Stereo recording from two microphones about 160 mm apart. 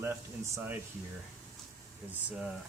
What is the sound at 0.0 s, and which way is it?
Speech, 15° right (ahead or behind).